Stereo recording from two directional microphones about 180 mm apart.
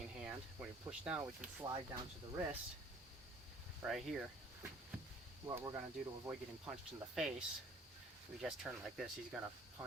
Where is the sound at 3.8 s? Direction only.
Centre (ahead or behind).